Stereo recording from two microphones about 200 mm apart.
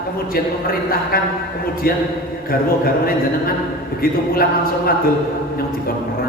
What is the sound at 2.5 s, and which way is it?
A man's voice, 50° left (ahead or behind).